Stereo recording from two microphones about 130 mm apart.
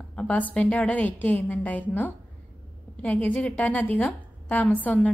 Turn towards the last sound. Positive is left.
turn(degrees=10)  # may be behind; listen again after turning